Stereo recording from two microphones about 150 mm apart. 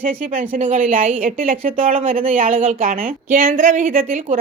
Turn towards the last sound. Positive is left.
turn(degrees=-65)  # may be behind; listen again after turning